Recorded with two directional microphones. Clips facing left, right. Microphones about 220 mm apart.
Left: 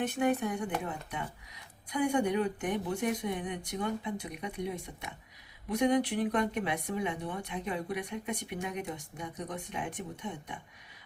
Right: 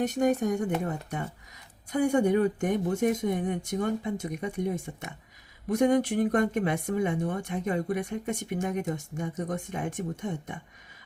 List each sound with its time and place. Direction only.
0.0 s speech: 40° right (ahead or behind)